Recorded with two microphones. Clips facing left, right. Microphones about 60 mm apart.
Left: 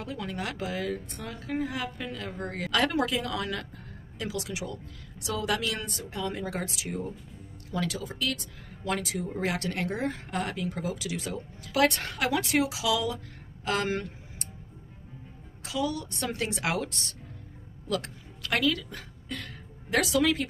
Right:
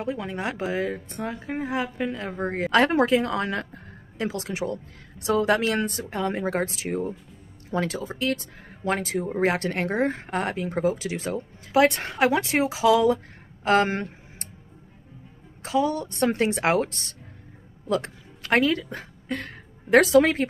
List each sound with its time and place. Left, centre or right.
0.0 s speech: right
7.7 s speech: right
13.7 s a sound: right
15.6 s a woman's voice: right